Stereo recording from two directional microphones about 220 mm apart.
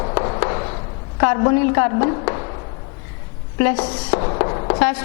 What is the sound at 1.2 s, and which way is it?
A woman's voice, 15° left (ahead or behind).